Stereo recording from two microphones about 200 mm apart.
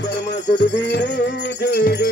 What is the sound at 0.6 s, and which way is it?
Jingle bell, 60° left (ahead or behind).